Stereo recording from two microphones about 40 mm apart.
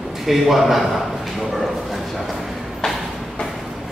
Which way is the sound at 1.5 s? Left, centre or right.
Centre.